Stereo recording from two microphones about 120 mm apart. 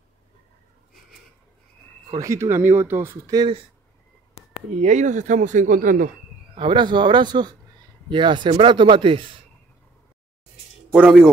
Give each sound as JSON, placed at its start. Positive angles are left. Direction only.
{"t": 2.0, "sound": "speech", "side_deg": -25}
{"t": 4.8, "sound": "a man's voice", "side_deg": -85}
{"t": 6.6, "sound": "speech", "side_deg": -40}
{"t": 10.9, "sound": "speech", "side_deg": -10}